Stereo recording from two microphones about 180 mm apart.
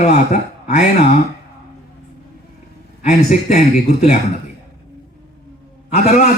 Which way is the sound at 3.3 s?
40° left (ahead or behind).